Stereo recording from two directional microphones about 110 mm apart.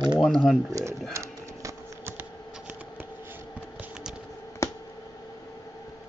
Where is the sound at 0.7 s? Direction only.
30° right (ahead or behind).